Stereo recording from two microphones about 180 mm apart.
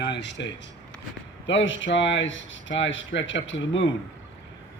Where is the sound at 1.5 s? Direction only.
90° left.